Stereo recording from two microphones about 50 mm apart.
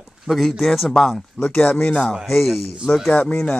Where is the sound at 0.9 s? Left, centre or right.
Centre.